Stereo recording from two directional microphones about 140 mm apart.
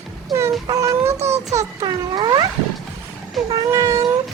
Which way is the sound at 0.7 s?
20° right (ahead or behind).